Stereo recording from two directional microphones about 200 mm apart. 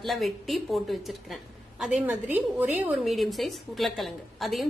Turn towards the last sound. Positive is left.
turn(degrees=0)  # may be behind; listen again after turning